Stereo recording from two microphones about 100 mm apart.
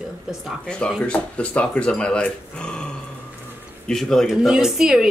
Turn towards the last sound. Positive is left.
turn(degrees=-5)  # may be behind; listen again after turning